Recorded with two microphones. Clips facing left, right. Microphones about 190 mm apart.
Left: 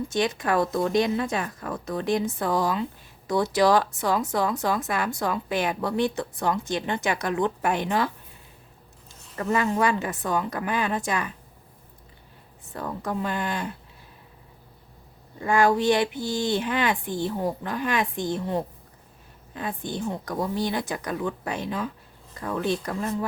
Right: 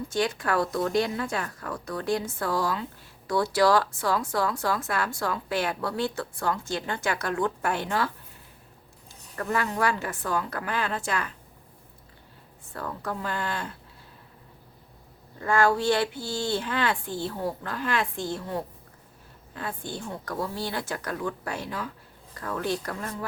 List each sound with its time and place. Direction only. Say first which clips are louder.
0.1 s speech: left 1 dB; 20° left (ahead or behind)
9.3 s speech: left 4 dB; 20° left (ahead or behind)
12.7 s speech: left 3 dB; 20° left (ahead or behind)
15.4 s speech: left 2 dB; 15° left (ahead or behind)